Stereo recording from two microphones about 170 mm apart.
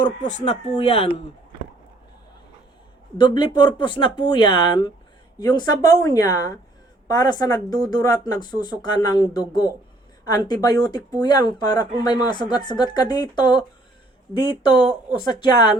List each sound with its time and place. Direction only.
0.0 s speech: 45° left (ahead or behind)
0.8 s speech: 35° left (ahead or behind)
3.2 s speech: 25° left (ahead or behind)